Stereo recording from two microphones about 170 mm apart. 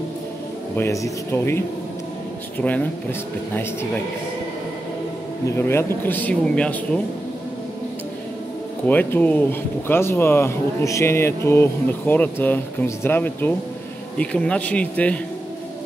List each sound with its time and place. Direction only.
0.7 s speech: 15° left (ahead or behind)
5.6 s speech: 15° left (ahead or behind)
8.8 s speech: 10° left (ahead or behind)